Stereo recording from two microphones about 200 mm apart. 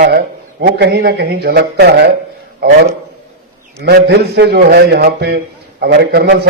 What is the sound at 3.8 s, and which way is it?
A man's voice, 55° right (ahead or behind).